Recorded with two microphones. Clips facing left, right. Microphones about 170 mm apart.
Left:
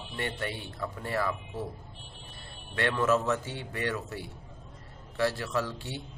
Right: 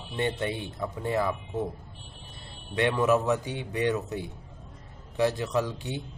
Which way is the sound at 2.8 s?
15° right (ahead or behind).